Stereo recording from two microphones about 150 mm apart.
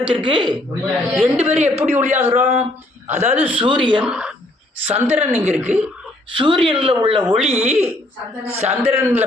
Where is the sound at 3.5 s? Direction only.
35° right (ahead or behind).